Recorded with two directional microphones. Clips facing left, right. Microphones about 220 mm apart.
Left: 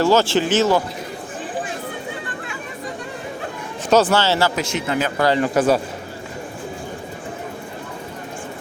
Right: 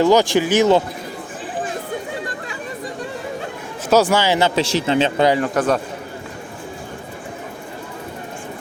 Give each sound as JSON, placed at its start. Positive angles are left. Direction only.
{"t": 0.0, "sound": "speech", "side_deg": -15}
{"t": 3.8, "sound": "speech", "side_deg": -10}
{"t": 4.6, "sound": "speech", "side_deg": -30}
{"t": 5.4, "sound": "a man's voice", "side_deg": 5}